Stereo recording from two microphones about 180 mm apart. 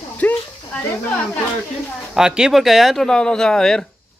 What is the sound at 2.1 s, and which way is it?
Speech, 5° right (ahead or behind).